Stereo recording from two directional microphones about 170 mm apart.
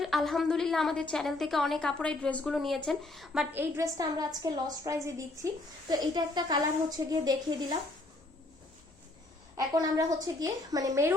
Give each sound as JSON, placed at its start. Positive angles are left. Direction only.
{"t": 0.0, "sound": "a woman's voice", "side_deg": 0}
{"t": 3.5, "sound": "a woman's voice", "side_deg": -15}
{"t": 9.6, "sound": "a woman's voice", "side_deg": -20}